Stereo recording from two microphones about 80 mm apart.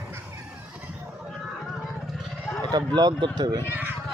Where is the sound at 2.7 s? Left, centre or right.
Right.